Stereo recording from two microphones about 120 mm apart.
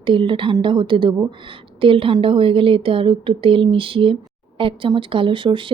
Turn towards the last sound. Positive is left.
turn(degrees=-45)  # may be behind; listen again after turning